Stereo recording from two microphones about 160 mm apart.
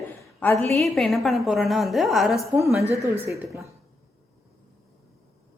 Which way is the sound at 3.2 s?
20° right (ahead or behind).